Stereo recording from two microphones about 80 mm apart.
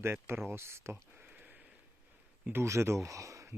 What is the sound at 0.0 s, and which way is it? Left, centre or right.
Speech, right.